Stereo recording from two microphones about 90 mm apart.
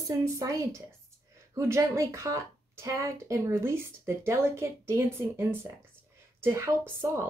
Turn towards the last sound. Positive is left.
turn(degrees=-25)  # may be behind; listen again after turning